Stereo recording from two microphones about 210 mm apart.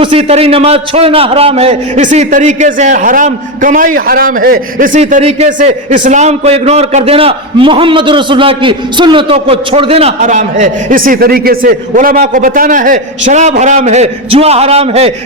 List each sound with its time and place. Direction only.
0.0 s a man's voice: 25° right (ahead or behind)